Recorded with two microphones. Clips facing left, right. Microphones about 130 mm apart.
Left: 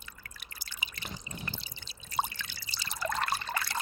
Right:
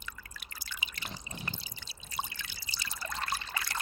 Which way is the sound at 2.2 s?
55° left (ahead or behind).